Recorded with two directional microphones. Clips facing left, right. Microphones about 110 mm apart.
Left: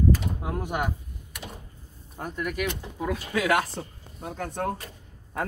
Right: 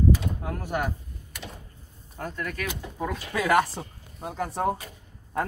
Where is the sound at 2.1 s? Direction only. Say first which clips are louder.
Left 2 dB; 15° left (ahead or behind).